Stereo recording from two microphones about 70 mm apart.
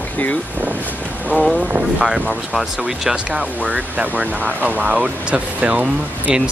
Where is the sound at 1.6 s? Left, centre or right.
Centre.